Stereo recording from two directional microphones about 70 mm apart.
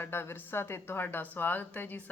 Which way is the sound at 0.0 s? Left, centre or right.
Left.